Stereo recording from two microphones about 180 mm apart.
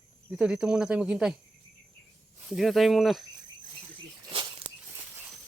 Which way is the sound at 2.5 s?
Centre (ahead or behind).